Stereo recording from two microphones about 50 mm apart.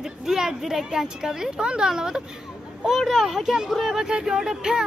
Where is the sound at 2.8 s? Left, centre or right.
Centre.